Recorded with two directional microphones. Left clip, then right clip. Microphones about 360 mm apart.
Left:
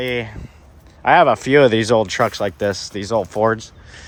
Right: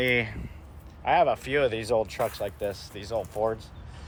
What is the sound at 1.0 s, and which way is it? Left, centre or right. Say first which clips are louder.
Speech: left 10 dB; left.